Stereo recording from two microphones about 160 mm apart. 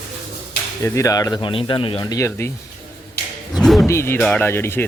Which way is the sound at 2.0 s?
20° left (ahead or behind).